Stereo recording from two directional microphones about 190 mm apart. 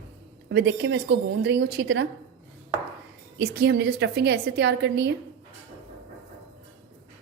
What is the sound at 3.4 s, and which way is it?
A woman's voice, 55° right (ahead or behind).